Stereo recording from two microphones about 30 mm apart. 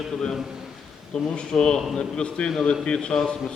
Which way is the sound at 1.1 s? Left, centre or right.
Left.